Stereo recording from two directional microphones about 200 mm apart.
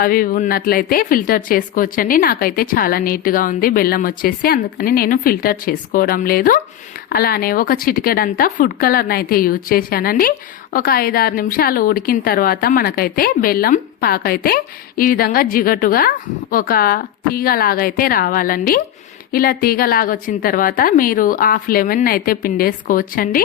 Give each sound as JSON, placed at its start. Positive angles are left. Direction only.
{"t": 0.0, "sound": "speech", "side_deg": 45}